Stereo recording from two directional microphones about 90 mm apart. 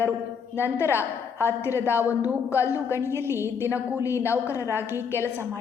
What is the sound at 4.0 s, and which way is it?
A man's voice, 35° left (ahead or behind).